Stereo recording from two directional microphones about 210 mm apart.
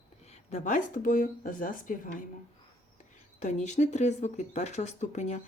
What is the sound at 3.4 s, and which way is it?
A woman's voice, 35° left (ahead or behind).